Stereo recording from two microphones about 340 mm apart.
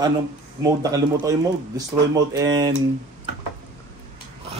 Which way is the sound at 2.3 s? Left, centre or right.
Centre.